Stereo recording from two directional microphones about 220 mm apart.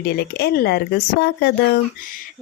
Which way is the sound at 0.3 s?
45° left (ahead or behind).